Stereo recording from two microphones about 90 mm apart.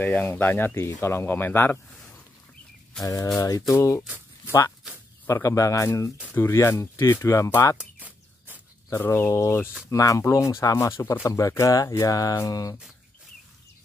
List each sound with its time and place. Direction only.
0.2 s speech: 25° left (ahead or behind)
3.0 s speech: 40° left (ahead or behind)
8.9 s speech: 25° left (ahead or behind); by 12.7 s 40° left (ahead or behind)